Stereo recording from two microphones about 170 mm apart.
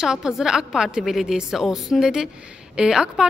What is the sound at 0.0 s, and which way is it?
A woman's voice, 5° right (ahead or behind).